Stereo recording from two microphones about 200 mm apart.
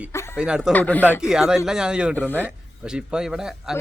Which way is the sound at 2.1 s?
10° left (ahead or behind).